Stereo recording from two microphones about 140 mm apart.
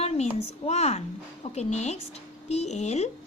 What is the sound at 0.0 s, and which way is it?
Speech, 45° left (ahead or behind).